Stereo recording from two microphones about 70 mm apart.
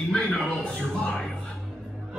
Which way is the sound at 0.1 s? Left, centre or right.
Centre.